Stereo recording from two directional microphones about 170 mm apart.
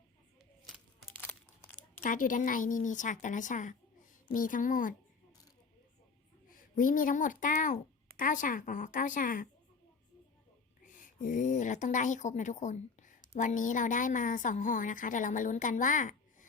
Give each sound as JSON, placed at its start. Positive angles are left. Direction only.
{"t": 1.1, "sound": "crumpling", "side_deg": 10}
{"t": 2.0, "sound": "a woman's voice", "side_deg": 50}
{"t": 6.5, "sound": "speech", "side_deg": 55}
{"t": 10.8, "sound": "a woman's voice", "side_deg": 50}